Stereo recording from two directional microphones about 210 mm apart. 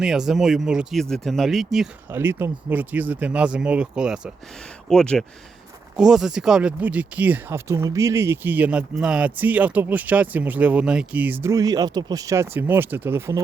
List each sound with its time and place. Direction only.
0.0 s speech: centre (ahead or behind)